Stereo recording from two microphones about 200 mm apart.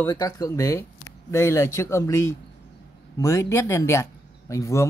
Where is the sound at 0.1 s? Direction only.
15° left (ahead or behind).